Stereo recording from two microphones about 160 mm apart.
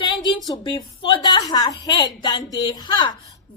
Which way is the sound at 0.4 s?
25° left (ahead or behind).